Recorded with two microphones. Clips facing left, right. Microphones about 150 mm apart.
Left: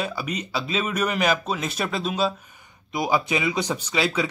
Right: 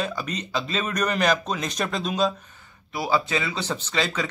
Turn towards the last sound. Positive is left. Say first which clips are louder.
# left 2 dB
turn(degrees=10)  # may be behind; listen again after turning